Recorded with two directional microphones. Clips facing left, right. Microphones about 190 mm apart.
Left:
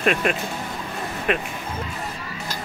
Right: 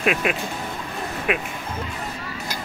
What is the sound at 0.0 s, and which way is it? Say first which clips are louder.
Speech: left 1 dB; 5° right (ahead or behind).